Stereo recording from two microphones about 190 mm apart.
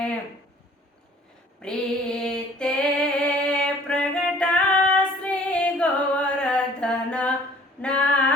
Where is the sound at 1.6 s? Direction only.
5° left (ahead or behind).